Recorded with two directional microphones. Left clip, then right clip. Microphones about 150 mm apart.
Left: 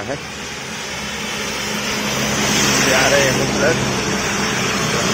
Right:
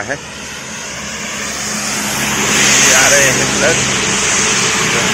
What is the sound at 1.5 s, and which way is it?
Vehicle, 90° left.